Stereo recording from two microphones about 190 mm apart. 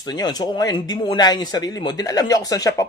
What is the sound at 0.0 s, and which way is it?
Speech, 20° left (ahead or behind).